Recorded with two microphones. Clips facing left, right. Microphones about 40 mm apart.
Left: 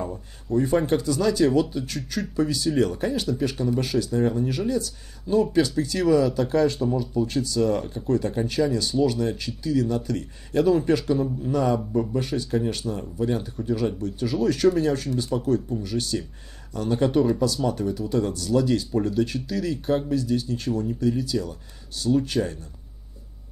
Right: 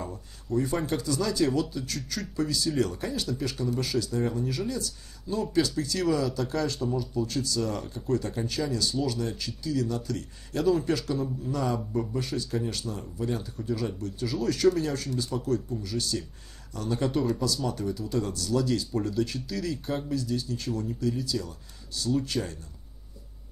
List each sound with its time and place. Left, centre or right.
0.0 s speech: left